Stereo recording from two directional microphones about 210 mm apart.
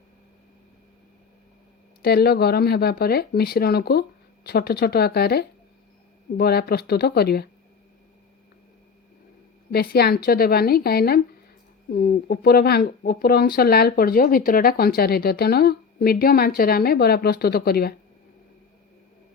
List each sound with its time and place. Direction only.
2.0 s speech: 50° left (ahead or behind)
9.7 s speech: 45° left (ahead or behind)